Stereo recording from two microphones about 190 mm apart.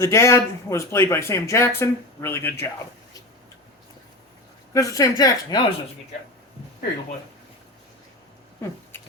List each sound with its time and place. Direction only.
0.0 s speech: 15° left (ahead or behind)
4.7 s speech: 20° left (ahead or behind)